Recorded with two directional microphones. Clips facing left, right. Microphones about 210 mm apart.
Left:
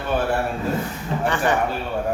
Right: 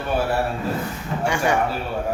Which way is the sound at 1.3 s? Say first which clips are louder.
Even; 10° right (ahead or behind).